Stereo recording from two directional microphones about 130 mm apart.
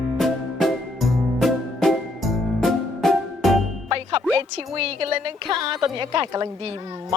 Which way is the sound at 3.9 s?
45° right (ahead or behind).